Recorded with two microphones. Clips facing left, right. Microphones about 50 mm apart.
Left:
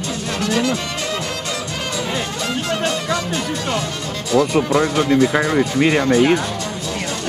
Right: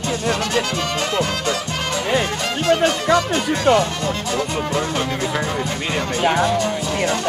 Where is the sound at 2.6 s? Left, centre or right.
Right.